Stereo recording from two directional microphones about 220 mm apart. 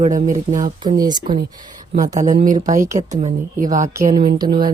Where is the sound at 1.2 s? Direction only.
40° right (ahead or behind).